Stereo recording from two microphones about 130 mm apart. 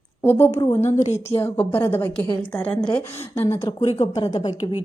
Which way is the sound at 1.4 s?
15° left (ahead or behind).